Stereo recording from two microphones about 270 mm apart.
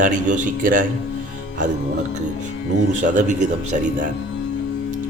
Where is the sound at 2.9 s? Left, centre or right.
Right.